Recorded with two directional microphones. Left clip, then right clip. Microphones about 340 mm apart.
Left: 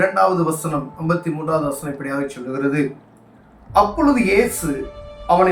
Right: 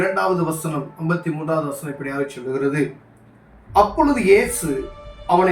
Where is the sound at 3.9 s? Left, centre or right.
Centre.